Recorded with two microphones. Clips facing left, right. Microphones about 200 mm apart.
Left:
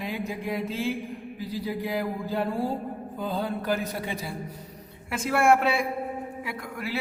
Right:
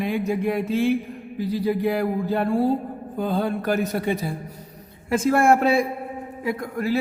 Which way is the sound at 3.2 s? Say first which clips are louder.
Right 6 dB; 70° right (ahead or behind).